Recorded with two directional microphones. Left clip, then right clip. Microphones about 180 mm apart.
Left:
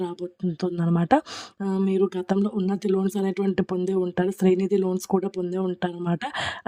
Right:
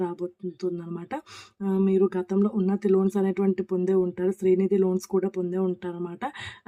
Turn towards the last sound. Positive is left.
turn(degrees=55)  # may be behind; listen again after turning